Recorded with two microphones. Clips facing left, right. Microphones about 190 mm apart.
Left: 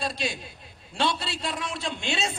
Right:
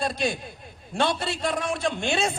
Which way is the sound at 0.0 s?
55° right (ahead or behind).